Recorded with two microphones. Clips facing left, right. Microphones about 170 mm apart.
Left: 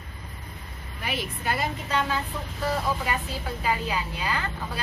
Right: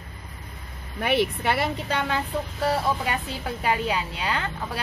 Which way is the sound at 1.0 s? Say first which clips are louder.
Right 8 dB; 70° right (ahead or behind).